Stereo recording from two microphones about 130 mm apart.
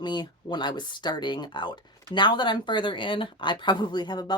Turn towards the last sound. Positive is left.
turn(degrees=35)  # may be behind; listen again after turning